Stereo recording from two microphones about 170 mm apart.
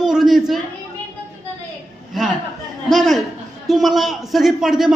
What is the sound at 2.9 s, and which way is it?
Speech, centre (ahead or behind).